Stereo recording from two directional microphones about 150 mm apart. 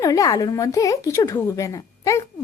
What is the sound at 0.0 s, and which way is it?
A woman's voice, 20° left (ahead or behind).